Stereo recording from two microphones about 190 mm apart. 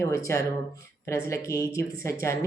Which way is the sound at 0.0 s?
15° left (ahead or behind).